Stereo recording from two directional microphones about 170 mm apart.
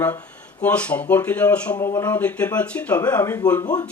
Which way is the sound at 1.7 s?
20° left (ahead or behind).